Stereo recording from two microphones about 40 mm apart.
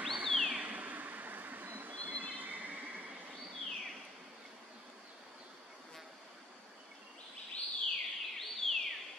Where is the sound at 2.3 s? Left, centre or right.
Right.